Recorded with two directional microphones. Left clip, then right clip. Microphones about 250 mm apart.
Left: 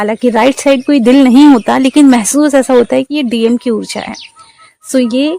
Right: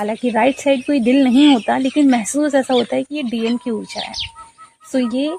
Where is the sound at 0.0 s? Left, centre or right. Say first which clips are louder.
Left 7 dB; left.